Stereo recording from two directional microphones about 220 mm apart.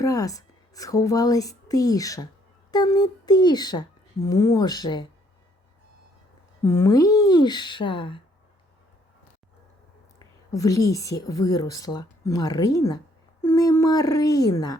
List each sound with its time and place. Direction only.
0.0 s a woman's voice: 15° left (ahead or behind)
6.7 s speech: 10° left (ahead or behind)
10.2 s a woman's voice: 15° left (ahead or behind)